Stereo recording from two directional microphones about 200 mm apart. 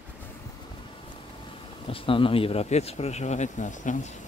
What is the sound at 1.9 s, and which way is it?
Speech, 25° left (ahead or behind).